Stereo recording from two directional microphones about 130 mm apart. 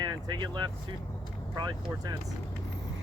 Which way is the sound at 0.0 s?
35° right (ahead or behind).